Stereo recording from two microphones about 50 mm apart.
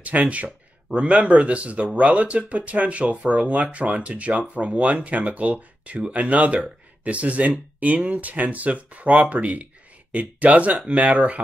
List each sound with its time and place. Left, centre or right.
0.0 s speech: right